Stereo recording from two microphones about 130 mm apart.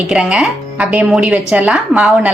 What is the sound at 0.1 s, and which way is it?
Speech, 5° right (ahead or behind).